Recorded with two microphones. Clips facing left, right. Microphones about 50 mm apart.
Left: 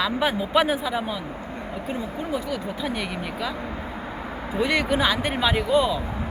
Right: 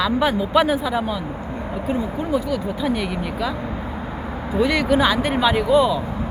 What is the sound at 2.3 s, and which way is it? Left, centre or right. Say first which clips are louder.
Speech: right 7 dB; centre.